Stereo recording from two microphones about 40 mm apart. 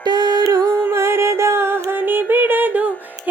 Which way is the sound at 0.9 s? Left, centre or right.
Right.